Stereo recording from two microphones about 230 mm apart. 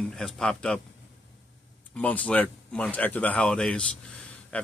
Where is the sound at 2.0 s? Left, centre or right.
Centre.